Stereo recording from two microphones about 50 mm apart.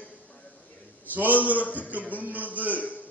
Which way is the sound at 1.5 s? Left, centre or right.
Left.